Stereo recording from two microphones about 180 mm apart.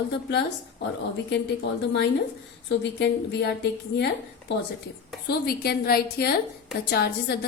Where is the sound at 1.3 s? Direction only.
70° left (ahead or behind).